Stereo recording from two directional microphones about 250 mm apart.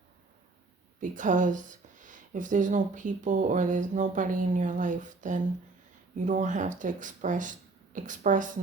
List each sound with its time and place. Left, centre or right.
1.0 s speech: right